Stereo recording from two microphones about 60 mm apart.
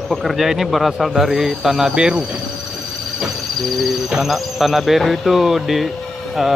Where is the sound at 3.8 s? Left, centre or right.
Centre.